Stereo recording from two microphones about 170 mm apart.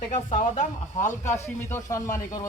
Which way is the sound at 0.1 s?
45° left (ahead or behind).